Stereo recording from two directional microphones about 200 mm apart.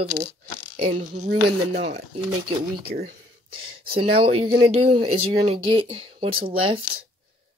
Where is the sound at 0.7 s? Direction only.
30° right (ahead or behind).